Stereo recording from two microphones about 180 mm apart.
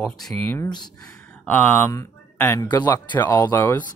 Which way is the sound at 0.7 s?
25° left (ahead or behind).